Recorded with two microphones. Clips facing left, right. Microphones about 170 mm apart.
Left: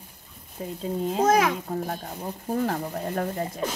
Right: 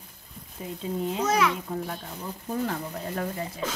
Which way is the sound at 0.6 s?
45° left (ahead or behind).